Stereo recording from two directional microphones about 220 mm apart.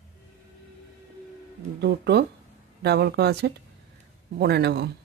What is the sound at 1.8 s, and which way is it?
Speech, 50° right (ahead or behind).